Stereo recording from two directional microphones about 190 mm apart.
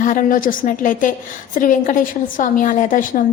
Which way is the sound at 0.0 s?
45° left (ahead or behind).